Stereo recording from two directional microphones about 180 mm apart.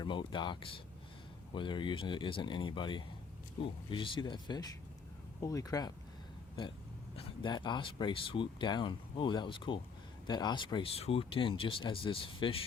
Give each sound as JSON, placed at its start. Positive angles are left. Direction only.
{"t": 0.0, "sound": "speech", "side_deg": 25}
{"t": 7.2, "sound": "speech", "side_deg": 25}